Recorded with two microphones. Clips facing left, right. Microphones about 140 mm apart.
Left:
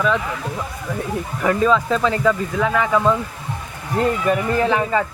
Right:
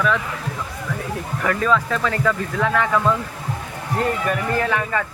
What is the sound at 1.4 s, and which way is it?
Speech, 20° left (ahead or behind).